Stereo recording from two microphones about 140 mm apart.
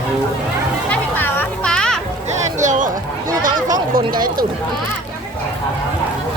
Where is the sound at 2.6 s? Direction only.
65° right (ahead or behind).